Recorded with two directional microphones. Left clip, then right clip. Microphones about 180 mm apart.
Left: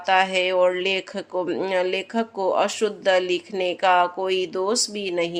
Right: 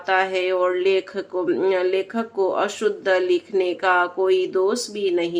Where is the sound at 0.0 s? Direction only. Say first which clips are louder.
Left 1 dB; 40° left (ahead or behind).